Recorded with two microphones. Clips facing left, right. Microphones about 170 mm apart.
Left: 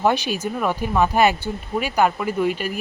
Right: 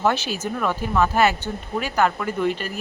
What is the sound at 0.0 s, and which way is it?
Speech, 15° left (ahead or behind).